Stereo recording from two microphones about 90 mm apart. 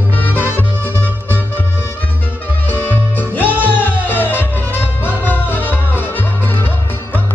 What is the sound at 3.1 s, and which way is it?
Music, 20° left (ahead or behind).